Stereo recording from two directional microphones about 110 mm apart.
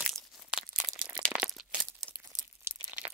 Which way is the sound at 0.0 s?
10° right (ahead or behind).